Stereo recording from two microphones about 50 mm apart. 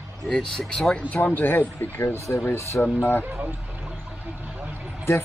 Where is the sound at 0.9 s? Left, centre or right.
Left.